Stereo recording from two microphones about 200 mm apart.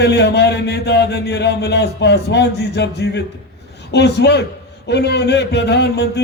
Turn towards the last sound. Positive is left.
turn(degrees=55)  # may be behind; listen again after turning